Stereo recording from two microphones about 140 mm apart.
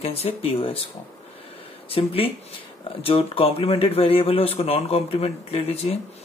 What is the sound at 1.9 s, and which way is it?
A man's voice, 40° left (ahead or behind).